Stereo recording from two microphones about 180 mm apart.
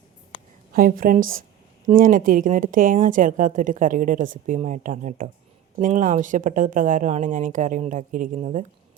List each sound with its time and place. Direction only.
0.7 s a woman's voice: 50° right (ahead or behind)